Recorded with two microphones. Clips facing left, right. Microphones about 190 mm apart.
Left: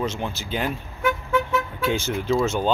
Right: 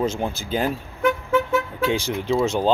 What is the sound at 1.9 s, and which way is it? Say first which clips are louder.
Speech: left 1 dB; 30° right (ahead or behind).